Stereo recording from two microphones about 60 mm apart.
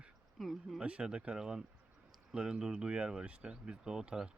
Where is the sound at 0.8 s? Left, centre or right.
Centre.